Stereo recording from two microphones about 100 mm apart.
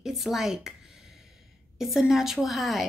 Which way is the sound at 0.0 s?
5° right (ahead or behind).